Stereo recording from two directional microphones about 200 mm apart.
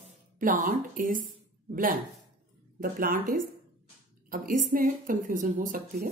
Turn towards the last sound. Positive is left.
turn(degrees=-40)  # may be behind; listen again after turning